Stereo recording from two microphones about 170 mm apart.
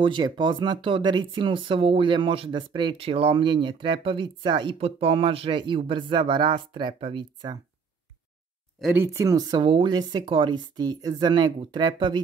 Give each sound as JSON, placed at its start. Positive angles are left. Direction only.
{"t": 0.0, "sound": "speech", "side_deg": -25}
{"t": 8.8, "sound": "speech", "side_deg": -15}